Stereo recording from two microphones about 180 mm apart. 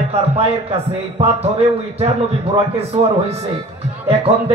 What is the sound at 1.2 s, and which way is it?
A man's voice, 35° right (ahead or behind).